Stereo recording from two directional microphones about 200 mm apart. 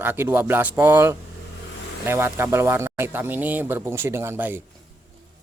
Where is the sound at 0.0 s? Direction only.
10° right (ahead or behind).